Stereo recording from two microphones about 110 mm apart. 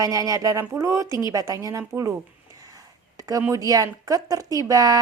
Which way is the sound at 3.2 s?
30° right (ahead or behind).